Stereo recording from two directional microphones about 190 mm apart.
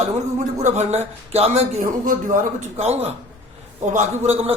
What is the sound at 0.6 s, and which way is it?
A man's voice, 40° right (ahead or behind).